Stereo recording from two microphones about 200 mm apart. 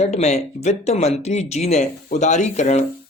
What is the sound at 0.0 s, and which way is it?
Speech, 35° left (ahead or behind).